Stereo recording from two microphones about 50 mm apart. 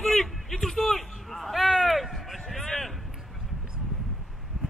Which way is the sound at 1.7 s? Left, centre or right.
Centre.